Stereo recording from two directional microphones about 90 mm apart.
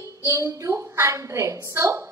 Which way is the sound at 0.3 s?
35° right (ahead or behind).